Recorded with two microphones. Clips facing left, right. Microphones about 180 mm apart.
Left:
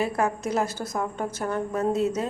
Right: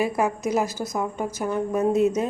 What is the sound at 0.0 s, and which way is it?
A woman's voice, 10° right (ahead or behind).